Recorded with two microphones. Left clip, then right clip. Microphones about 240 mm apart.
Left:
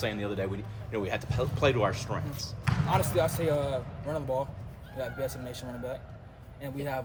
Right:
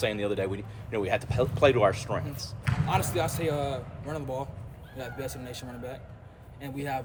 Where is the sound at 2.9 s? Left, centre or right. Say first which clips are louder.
Left 1 dB; centre.